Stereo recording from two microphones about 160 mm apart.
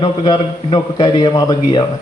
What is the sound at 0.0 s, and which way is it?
A man's voice, 25° left (ahead or behind).